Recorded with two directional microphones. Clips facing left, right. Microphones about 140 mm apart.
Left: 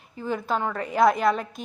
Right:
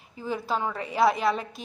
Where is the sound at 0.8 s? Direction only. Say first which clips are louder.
Left 3 dB; 5° right (ahead or behind).